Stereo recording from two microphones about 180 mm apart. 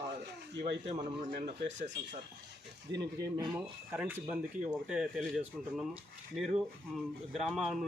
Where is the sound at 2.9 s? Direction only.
20° right (ahead or behind).